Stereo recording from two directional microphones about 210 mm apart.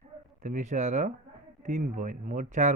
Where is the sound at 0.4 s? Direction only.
35° right (ahead or behind).